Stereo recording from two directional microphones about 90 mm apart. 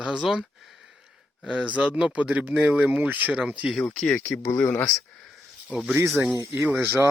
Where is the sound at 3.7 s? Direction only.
5° left (ahead or behind).